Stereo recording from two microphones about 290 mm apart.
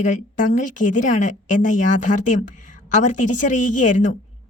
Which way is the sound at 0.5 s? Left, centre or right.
Left.